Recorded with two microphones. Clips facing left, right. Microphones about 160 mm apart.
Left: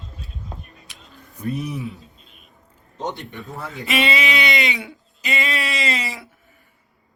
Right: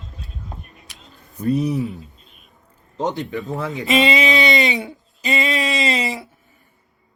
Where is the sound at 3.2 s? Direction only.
90° right.